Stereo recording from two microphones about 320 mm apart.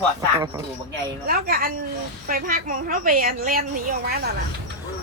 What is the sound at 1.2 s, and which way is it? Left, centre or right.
A woman's voice, right.